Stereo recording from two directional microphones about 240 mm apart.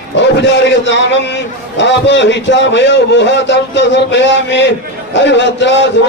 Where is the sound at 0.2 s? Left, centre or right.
Left.